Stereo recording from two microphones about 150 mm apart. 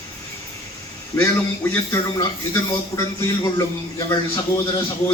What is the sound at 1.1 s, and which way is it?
Speech, 15° left (ahead or behind).